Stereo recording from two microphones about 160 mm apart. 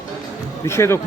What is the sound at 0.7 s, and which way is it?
Speech, 15° left (ahead or behind).